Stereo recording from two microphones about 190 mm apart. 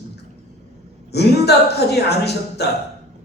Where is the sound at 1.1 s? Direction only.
60° left (ahead or behind).